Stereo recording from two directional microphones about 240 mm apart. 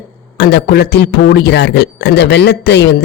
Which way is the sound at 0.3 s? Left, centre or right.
Left.